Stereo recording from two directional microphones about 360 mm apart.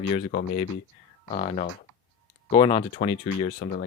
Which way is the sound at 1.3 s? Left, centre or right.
Centre.